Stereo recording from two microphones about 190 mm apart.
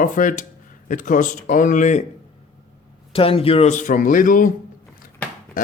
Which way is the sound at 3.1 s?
30° left (ahead or behind).